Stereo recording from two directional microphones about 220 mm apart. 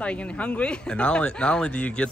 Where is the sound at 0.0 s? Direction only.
5° left (ahead or behind).